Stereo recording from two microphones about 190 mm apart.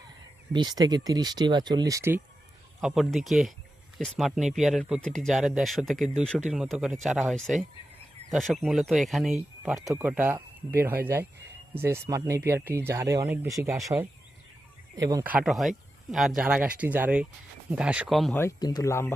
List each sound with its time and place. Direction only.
0.5 s speech: 20° right (ahead or behind)
2.8 s speech: centre (ahead or behind); by 15.2 s 20° right (ahead or behind)
15.2 s speech: 5° right (ahead or behind)
18.3 s speech: 15° left (ahead or behind)